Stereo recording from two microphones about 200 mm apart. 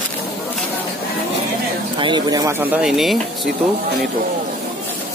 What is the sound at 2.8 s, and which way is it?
Speech, centre (ahead or behind).